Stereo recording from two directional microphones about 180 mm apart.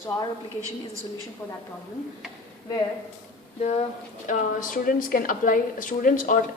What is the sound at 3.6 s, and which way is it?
A woman's voice, 40° left (ahead or behind).